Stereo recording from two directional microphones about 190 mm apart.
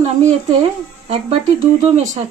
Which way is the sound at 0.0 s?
35° right (ahead or behind).